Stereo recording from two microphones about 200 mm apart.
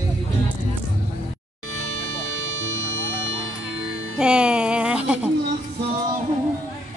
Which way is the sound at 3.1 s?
70° right (ahead or behind).